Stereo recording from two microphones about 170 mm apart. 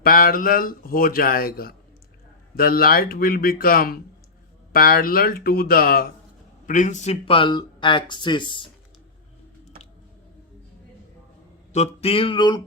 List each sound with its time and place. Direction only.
0.0 s a man's voice: 60° left (ahead or behind)
6.7 s speech: 50° left (ahead or behind); by 8.7 s 30° left (ahead or behind)
11.7 s music: 40° left (ahead or behind)